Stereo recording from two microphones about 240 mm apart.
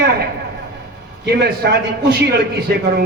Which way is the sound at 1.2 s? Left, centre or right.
Right.